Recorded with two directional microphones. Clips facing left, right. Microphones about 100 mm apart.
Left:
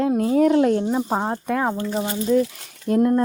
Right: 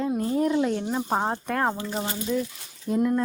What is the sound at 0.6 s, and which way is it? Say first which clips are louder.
Speech: left 7 dB; 45° left (ahead or behind).